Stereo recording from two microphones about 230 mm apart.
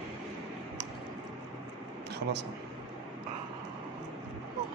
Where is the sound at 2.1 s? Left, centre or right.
Right.